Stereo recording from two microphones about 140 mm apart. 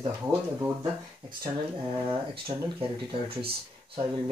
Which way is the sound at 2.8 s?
40° right (ahead or behind).